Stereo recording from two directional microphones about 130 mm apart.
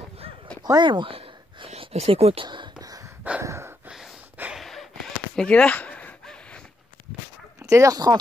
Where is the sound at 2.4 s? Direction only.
35° right (ahead or behind).